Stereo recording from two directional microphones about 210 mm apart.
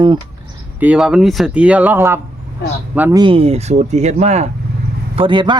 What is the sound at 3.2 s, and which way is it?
Speech, 25° right (ahead or behind).